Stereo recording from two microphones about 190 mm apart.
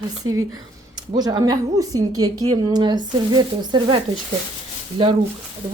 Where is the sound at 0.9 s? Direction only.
20° right (ahead or behind).